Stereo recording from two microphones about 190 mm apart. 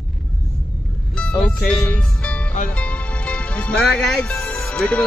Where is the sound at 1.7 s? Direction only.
5° left (ahead or behind).